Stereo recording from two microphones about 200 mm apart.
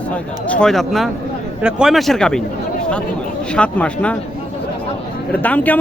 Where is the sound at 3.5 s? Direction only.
5° left (ahead or behind).